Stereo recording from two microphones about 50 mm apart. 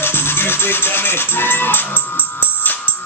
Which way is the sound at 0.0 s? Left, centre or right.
Left.